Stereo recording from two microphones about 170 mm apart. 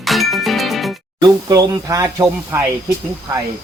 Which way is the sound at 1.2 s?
20° right (ahead or behind).